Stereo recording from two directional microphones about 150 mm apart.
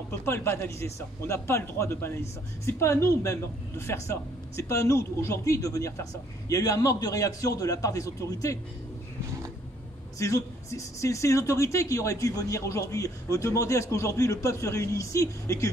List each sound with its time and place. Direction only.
0.2 s speech: 15° left (ahead or behind)
10.1 s speech: 20° left (ahead or behind)